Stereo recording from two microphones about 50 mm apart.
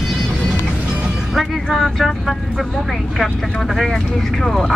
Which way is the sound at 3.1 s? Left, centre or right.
Centre.